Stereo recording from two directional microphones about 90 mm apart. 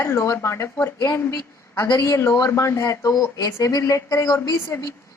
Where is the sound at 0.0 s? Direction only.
35° left (ahead or behind).